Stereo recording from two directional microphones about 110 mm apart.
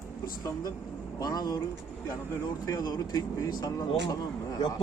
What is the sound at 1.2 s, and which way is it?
Speech, 35° left (ahead or behind).